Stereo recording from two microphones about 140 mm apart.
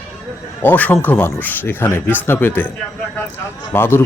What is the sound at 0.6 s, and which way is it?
Speech, 10° left (ahead or behind).